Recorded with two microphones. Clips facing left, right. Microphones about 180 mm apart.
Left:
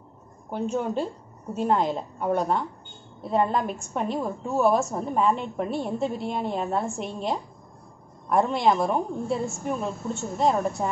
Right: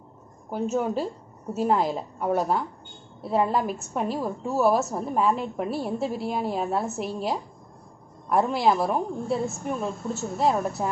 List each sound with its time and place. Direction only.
0.5 s a woman's voice: 5° right (ahead or behind)